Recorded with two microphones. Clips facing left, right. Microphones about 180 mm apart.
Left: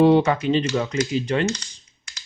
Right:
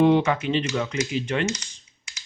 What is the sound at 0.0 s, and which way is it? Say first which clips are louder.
Speech: left 3 dB; 35° left (ahead or behind).